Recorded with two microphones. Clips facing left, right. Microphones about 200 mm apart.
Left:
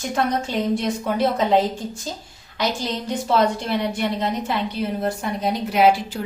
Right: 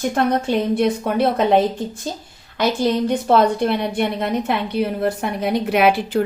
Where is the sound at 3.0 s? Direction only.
55° right (ahead or behind).